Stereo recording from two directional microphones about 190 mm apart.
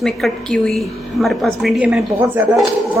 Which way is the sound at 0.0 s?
5° left (ahead or behind).